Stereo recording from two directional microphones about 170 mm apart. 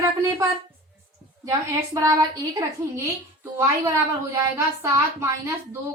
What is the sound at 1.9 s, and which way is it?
A woman's voice, 20° right (ahead or behind).